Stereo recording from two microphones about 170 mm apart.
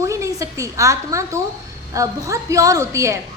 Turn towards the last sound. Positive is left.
turn(degrees=-15)  # may be behind; listen again after turning